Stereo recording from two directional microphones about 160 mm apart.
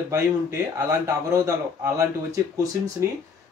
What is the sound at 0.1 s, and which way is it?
A man's voice, 20° right (ahead or behind).